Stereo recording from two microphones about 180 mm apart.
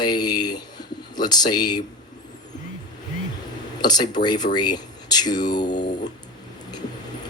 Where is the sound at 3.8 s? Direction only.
25° left (ahead or behind).